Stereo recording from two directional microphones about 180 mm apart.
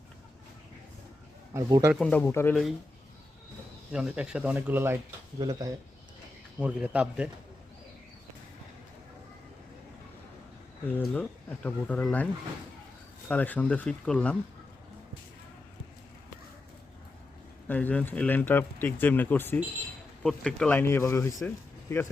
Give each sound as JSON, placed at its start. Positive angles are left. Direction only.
{"t": 1.5, "sound": "speech", "side_deg": -15}
{"t": 2.0, "sound": "speech", "side_deg": 10}
{"t": 3.9, "sound": "speech", "side_deg": -5}
{"t": 6.6, "sound": "speech", "side_deg": -5}
{"t": 10.8, "sound": "speech", "side_deg": 10}
{"t": 17.7, "sound": "speech", "side_deg": 10}